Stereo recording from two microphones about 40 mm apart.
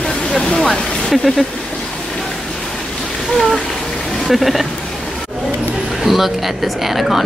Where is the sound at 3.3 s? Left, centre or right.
Centre.